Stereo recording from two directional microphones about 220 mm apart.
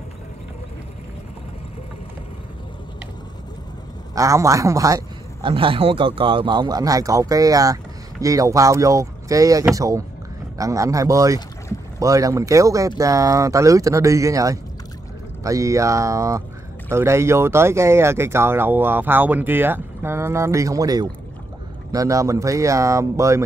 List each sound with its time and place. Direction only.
4.1 s a man's voice: 15° right (ahead or behind)